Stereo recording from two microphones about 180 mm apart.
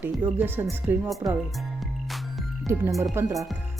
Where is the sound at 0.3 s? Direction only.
10° right (ahead or behind).